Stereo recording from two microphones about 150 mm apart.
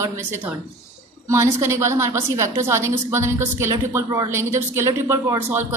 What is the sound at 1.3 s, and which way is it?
A woman's voice, 20° right (ahead or behind).